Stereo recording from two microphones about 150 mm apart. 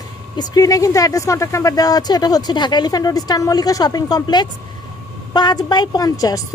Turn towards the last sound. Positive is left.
turn(degrees=25)  # may be behind; listen again after turning